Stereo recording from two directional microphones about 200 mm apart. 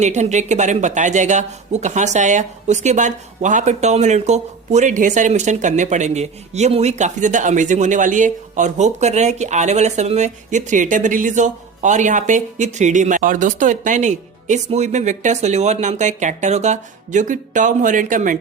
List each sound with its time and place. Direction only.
0.0 s speech: 35° right (ahead or behind)